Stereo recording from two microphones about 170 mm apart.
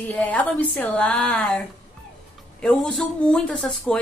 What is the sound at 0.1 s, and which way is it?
A woman's voice, 10° left (ahead or behind).